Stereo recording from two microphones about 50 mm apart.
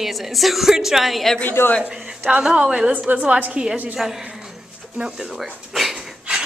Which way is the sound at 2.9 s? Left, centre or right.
Right.